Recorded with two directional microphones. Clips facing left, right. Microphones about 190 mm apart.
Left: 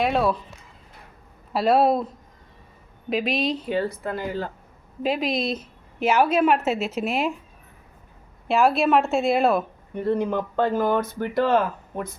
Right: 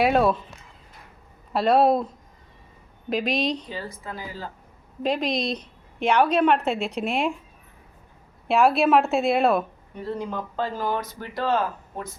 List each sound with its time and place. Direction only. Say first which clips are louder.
0.0 s a woman's voice: right 2 dB; centre (ahead or behind)
1.5 s a woman's voice: even; centre (ahead or behind)
3.1 s a woman's voice: left 1 dB; centre (ahead or behind)
3.7 s speech: left 9 dB; 60° left (ahead or behind)
5.0 s a woman's voice: left 1 dB; 5° left (ahead or behind)
8.4 s a woman's voice: even; centre (ahead or behind)
9.9 s speech: left 7 dB; 55° left (ahead or behind)